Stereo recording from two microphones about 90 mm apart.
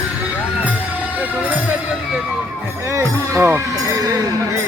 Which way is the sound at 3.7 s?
40° right (ahead or behind).